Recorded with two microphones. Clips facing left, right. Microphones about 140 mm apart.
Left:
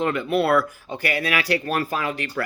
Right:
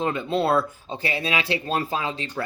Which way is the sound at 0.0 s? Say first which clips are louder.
Left 2 dB; 20° right (ahead or behind).